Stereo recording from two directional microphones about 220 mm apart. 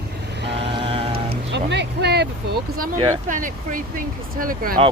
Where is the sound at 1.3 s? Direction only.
50° right (ahead or behind).